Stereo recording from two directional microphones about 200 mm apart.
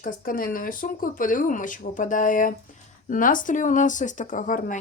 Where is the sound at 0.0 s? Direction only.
45° left (ahead or behind).